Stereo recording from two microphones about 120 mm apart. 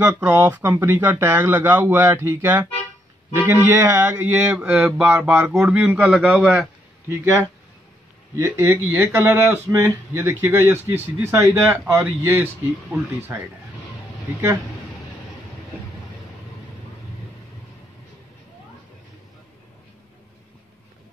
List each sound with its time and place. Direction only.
0.0 s speech: 20° right (ahead or behind); by 6.7 s 5° right (ahead or behind)
8.5 s speech: 20° right (ahead or behind)
11.3 s speech: 25° right (ahead or behind)